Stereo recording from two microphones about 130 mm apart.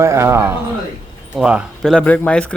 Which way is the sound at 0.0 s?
20° right (ahead or behind).